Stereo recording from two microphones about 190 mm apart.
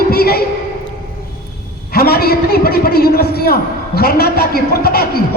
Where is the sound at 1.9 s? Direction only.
55° left (ahead or behind).